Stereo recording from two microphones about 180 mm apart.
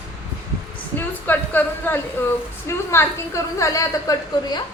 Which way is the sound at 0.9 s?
10° left (ahead or behind).